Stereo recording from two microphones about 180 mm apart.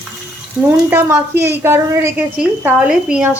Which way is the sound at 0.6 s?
15° right (ahead or behind).